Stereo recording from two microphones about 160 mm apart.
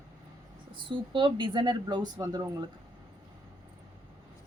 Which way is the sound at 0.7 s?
30° right (ahead or behind).